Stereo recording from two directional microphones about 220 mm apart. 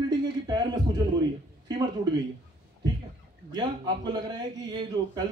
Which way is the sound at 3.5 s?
20° right (ahead or behind).